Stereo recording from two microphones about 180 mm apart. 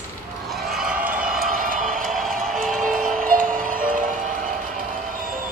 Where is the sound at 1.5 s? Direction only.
50° right (ahead or behind).